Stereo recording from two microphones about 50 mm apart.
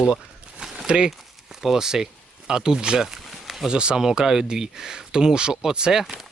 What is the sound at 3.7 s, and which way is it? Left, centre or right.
Speech, centre.